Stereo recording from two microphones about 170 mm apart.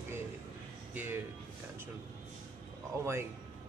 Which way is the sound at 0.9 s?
10° right (ahead or behind).